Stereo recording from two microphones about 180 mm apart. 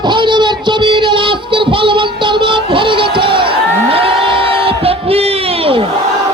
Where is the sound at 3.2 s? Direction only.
30° right (ahead or behind).